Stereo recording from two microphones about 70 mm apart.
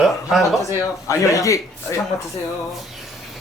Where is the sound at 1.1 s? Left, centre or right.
Left.